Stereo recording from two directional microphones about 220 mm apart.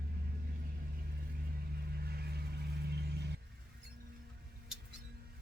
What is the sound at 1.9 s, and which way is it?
Vehicle, 45° right (ahead or behind).